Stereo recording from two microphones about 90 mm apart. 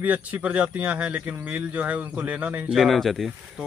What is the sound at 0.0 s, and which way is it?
Speech, 15° right (ahead or behind).